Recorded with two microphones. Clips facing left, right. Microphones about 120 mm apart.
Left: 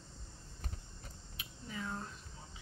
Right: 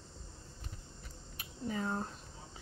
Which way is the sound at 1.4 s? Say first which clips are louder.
Right 7 dB; 40° right (ahead or behind).